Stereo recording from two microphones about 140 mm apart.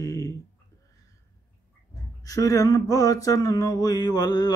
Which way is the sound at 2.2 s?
25° left (ahead or behind).